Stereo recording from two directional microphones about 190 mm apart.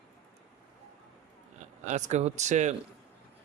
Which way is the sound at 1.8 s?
40° right (ahead or behind).